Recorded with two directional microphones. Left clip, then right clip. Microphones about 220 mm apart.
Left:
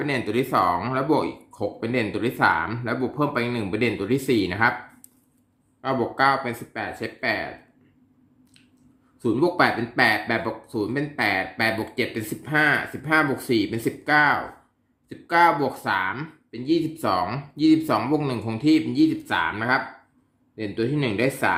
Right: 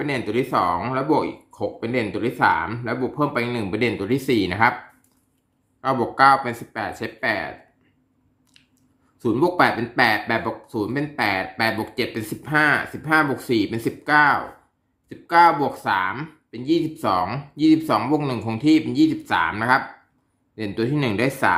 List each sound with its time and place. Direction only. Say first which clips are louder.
0.0 s speech: right 1 dB; centre (ahead or behind)
5.8 s speech: right 5 dB; 15° right (ahead or behind)
9.2 s speech: right 2 dB; 10° right (ahead or behind)